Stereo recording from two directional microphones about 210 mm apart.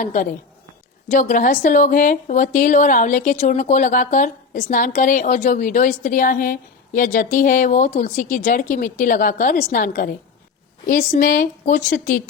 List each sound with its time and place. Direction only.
0.0 s speech: 35° left (ahead or behind)